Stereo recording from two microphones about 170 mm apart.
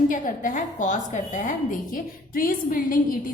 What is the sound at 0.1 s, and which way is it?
A woman's voice, 50° left (ahead or behind).